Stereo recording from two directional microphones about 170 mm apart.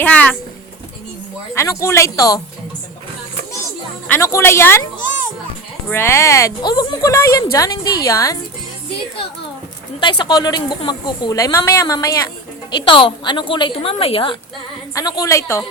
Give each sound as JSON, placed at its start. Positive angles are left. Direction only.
{"t": 0.0, "sound": "speech", "side_deg": 10}
{"t": 1.5, "sound": "speech", "side_deg": 20}
{"t": 4.1, "sound": "speech", "side_deg": 15}
{"t": 5.9, "sound": "speech", "side_deg": 15}
{"t": 10.0, "sound": "speech", "side_deg": 25}
{"t": 14.9, "sound": "speech", "side_deg": 20}